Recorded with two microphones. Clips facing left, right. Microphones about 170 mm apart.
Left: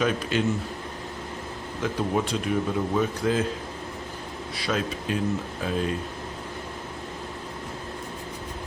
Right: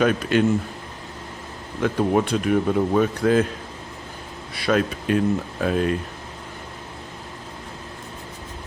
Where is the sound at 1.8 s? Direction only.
60° right (ahead or behind).